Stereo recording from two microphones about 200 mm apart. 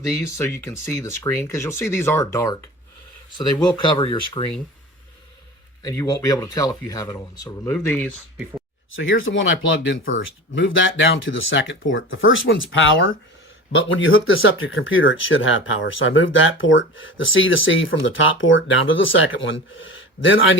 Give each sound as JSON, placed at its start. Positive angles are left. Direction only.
{"t": 0.2, "sound": "speech", "side_deg": 15}
{"t": 3.8, "sound": "speech", "side_deg": 25}
{"t": 5.8, "sound": "speech", "side_deg": 15}
{"t": 9.0, "sound": "speech", "side_deg": 75}